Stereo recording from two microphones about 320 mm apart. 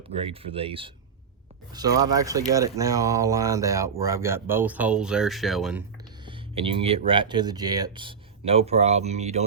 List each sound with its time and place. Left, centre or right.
0.1 s speech: centre
6.2 s speech: centre